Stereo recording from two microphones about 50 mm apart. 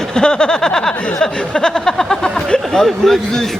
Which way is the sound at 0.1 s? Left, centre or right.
Centre.